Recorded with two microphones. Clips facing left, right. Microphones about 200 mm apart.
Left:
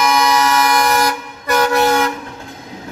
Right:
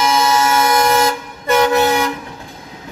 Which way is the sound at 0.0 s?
25° right (ahead or behind).